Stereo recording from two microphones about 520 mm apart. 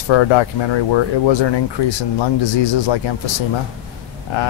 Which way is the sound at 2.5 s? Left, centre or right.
Left.